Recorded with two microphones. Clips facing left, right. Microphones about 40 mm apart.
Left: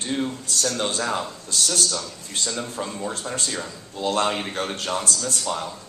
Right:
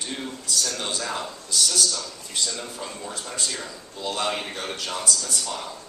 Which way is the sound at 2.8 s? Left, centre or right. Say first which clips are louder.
Left 5 dB; left.